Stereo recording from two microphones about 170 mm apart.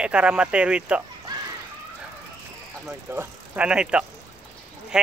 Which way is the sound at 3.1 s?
10° right (ahead or behind).